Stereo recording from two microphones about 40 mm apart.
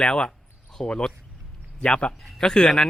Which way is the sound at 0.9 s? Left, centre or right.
Left.